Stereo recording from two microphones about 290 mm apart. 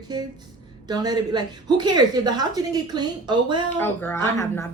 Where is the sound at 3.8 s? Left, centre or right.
Centre.